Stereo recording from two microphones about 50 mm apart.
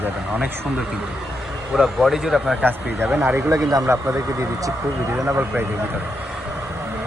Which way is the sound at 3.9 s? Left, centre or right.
Right.